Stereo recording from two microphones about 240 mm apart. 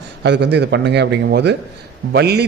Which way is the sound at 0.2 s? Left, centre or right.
Right.